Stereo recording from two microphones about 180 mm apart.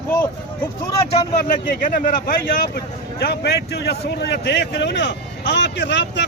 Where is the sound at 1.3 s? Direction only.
40° left (ahead or behind).